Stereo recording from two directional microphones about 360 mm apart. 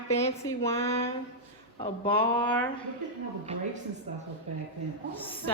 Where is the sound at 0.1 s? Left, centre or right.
Centre.